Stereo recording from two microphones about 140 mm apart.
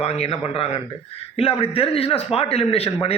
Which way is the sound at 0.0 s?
45° left (ahead or behind).